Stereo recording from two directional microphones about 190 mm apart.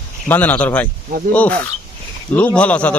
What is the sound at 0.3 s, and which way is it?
A man's voice, 10° left (ahead or behind).